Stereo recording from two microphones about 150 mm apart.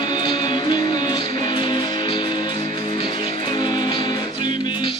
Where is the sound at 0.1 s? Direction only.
30° left (ahead or behind).